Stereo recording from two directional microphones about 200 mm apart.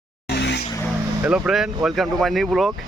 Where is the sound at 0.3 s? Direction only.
60° left (ahead or behind).